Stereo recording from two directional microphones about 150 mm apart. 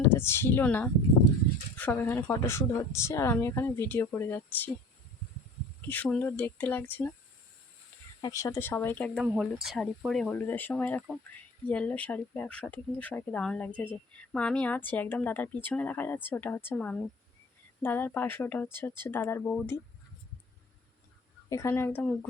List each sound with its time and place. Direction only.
0.1 s a woman's voice: 15° left (ahead or behind)
5.9 s a woman's voice: 10° left (ahead or behind)
8.2 s a woman's voice: 20° left (ahead or behind)
9.2 s a woman's voice: 5° right (ahead or behind); by 19.8 s 15° left (ahead or behind)
21.5 s a woman's voice: 15° left (ahead or behind)